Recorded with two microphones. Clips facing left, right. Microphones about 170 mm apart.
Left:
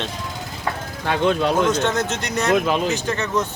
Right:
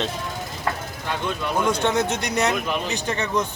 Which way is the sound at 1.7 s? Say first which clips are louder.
Left 1 dB; 15° right (ahead or behind).